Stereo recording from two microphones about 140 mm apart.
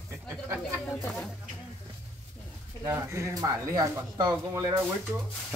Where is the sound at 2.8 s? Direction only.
20° right (ahead or behind).